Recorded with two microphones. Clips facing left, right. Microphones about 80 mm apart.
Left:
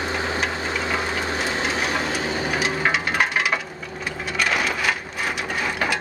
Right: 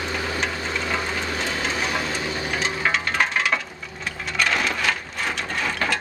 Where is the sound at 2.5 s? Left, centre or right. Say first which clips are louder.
Left 1 dB; centre.